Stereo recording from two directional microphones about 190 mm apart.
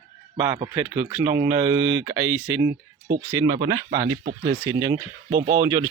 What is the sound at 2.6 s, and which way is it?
Speech, 60° right (ahead or behind).